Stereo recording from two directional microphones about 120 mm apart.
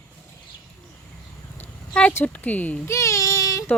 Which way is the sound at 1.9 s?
10° left (ahead or behind).